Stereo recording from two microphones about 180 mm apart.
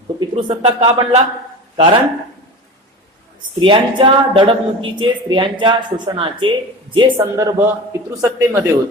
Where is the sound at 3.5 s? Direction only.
25° right (ahead or behind).